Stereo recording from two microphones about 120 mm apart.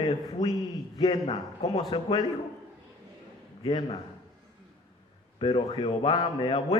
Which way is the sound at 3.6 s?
45° left (ahead or behind).